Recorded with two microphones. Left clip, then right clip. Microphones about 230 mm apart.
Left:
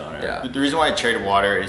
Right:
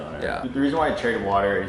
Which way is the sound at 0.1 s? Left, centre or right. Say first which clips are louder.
Left 1 dB; centre.